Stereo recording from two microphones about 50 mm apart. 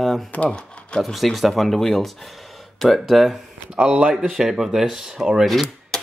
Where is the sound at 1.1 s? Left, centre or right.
Centre.